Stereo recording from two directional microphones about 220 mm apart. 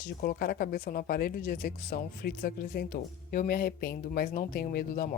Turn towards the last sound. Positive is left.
turn(degrees=40)  # may be behind; listen again after turning